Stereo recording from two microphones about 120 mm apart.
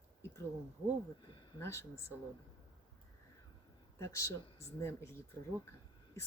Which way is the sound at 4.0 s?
25° left (ahead or behind).